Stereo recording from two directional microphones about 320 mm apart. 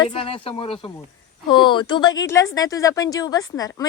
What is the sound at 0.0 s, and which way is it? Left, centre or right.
Speech, centre.